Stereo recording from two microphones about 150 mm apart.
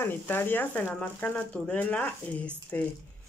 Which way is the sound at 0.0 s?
15° left (ahead or behind).